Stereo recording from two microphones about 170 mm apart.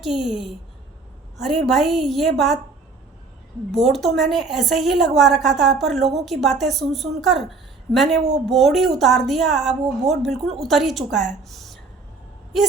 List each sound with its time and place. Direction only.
0.0 s speech: centre (ahead or behind)
3.7 s speech: centre (ahead or behind)
8.1 s a woman's voice: 80° right
8.4 s speech: centre (ahead or behind)